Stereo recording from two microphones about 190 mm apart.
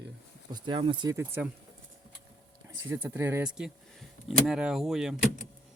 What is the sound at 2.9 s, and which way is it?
Speech, 10° right (ahead or behind).